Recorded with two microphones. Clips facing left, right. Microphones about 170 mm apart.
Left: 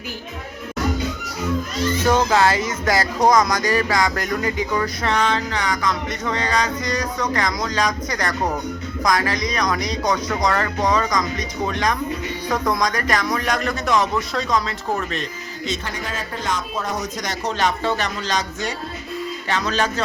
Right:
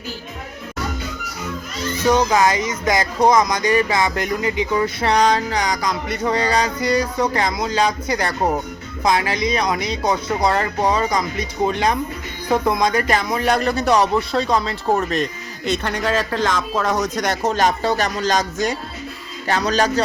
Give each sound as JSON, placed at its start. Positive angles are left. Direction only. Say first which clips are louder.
{"t": 2.3, "sound": "speech", "louder": "right 1 dB", "side_deg": -15}
{"t": 4.8, "sound": "music", "louder": "right 7 dB", "side_deg": -30}
{"t": 9.0, "sound": "speech", "louder": "right 3 dB", "side_deg": -25}
{"t": 9.9, "sound": "music", "louder": "right 1 dB", "side_deg": -30}
{"t": 15.6, "sound": "speech", "louder": "right 7 dB", "side_deg": -65}
{"t": 19.5, "sound": "music", "louder": "right 4 dB", "side_deg": -40}